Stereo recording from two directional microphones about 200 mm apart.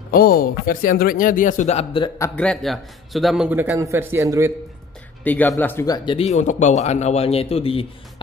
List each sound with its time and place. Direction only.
0.1 s a man's voice: 50° left (ahead or behind); by 2.0 s 30° left (ahead or behind)
2.0 s a man's voice: 15° left (ahead or behind); by 4.5 s 15° right (ahead or behind)
5.2 s speech: 10° left (ahead or behind); by 7.8 s 30° left (ahead or behind)